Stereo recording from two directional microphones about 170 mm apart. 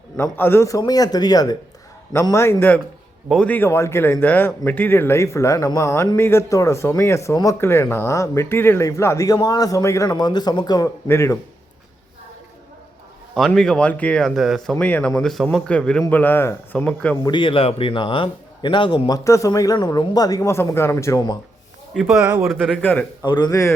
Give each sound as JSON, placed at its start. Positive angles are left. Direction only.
{"t": 0.2, "sound": "a man's voice", "side_deg": 15}
{"t": 13.3, "sound": "a man's voice", "side_deg": 0}
{"t": 17.2, "sound": "a man's voice", "side_deg": 30}
{"t": 21.9, "sound": "speech", "side_deg": 0}
{"t": 22.5, "sound": "speech", "side_deg": 5}
{"t": 23.2, "sound": "a man's voice", "side_deg": 25}